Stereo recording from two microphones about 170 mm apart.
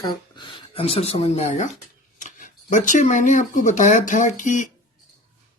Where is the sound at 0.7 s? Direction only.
35° left (ahead or behind).